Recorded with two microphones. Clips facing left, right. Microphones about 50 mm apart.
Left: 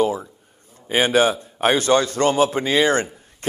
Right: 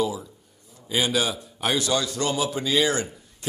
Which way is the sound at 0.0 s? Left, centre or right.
Left.